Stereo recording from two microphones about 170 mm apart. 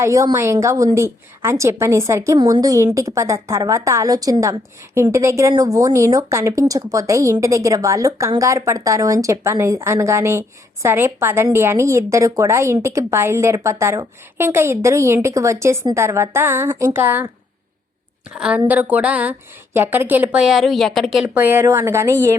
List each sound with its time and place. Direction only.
0.0 s a woman's voice: 20° right (ahead or behind)
18.3 s a woman's voice: 5° right (ahead or behind)